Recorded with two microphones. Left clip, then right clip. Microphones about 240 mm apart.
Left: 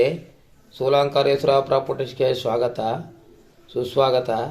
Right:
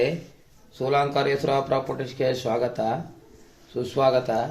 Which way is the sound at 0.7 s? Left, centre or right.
Centre.